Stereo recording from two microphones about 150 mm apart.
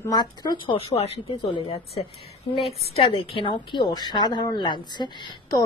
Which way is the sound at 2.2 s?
40° left (ahead or behind).